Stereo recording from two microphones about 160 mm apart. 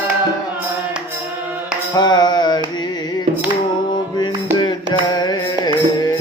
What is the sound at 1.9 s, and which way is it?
Mantra, 25° left (ahead or behind).